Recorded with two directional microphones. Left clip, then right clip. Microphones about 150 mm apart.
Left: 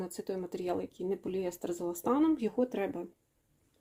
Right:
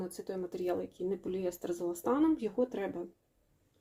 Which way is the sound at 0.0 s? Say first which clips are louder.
Left 1 dB; 30° left (ahead or behind).